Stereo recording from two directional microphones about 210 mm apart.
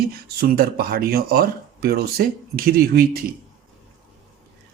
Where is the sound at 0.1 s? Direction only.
45° right (ahead or behind).